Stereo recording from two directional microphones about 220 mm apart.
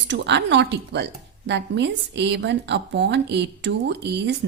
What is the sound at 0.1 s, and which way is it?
A woman's voice, 50° right (ahead or behind).